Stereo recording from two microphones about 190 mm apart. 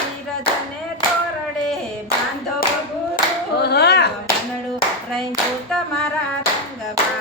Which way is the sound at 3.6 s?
60° left (ahead or behind).